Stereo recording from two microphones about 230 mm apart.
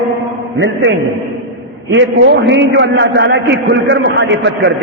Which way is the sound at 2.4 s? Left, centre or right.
Right.